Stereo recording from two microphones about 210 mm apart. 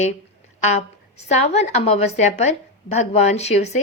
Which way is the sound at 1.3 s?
30° left (ahead or behind).